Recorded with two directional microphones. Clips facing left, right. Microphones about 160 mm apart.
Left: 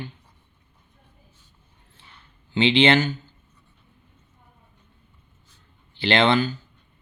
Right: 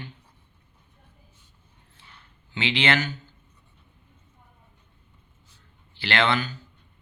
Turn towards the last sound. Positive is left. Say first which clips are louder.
# left 5 dB
turn(degrees=25)  # may be behind; listen again after turning